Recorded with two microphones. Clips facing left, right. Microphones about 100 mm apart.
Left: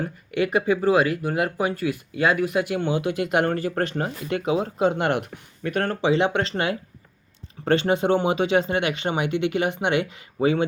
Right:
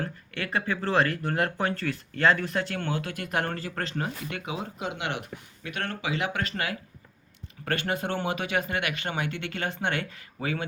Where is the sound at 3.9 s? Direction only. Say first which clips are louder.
Left 6 dB; 35° left (ahead or behind).